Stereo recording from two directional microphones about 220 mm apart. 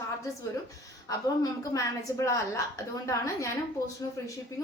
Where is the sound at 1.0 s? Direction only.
15° left (ahead or behind).